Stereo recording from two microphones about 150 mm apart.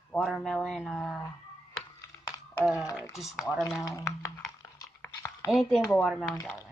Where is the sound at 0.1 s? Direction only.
5° left (ahead or behind).